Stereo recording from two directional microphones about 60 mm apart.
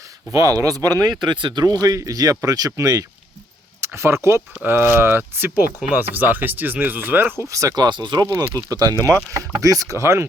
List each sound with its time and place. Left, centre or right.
0.3 s speech: right
3.8 s speech: right
7.4 s speech: right
9.0 s speech: right
10.0 s speech: right